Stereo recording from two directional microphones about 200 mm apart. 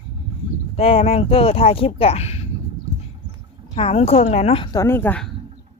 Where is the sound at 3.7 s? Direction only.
30° left (ahead or behind).